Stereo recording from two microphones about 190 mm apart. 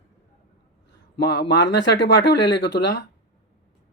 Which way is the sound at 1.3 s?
65° left (ahead or behind).